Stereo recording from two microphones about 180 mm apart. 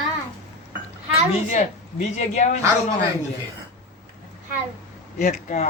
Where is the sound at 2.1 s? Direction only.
40° left (ahead or behind).